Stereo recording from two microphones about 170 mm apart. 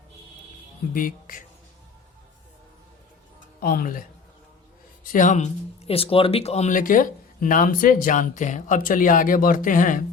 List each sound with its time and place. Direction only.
0.9 s speech: 55° left (ahead or behind)
3.6 s speech: 60° left (ahead or behind)
5.1 s speech: 45° left (ahead or behind)